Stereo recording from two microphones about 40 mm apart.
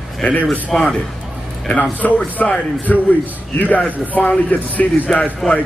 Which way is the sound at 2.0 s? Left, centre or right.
Left.